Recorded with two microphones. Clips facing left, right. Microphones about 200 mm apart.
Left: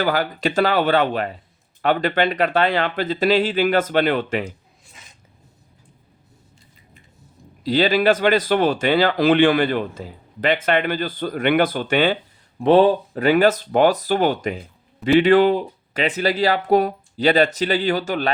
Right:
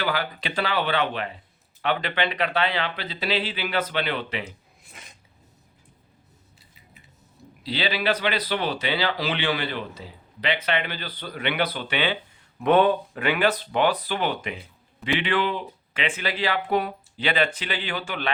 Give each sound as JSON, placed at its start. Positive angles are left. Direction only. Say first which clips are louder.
{"t": 0.0, "sound": "speech", "louder": "left 7 dB", "side_deg": 45}
{"t": 7.6, "sound": "speech", "louder": "left 9 dB", "side_deg": 45}
{"t": 12.5, "sound": "speech", "louder": "left 5 dB", "side_deg": 30}